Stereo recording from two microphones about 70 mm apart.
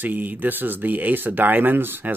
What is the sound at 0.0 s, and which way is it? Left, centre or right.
Speech, right.